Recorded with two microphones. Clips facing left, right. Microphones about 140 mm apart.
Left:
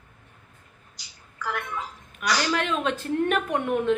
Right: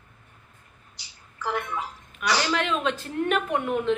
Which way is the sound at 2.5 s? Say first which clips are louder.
Even; 45° left (ahead or behind).